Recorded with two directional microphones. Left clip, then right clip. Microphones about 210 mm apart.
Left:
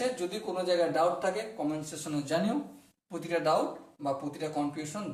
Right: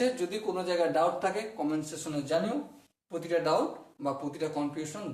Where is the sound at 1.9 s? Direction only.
5° right (ahead or behind).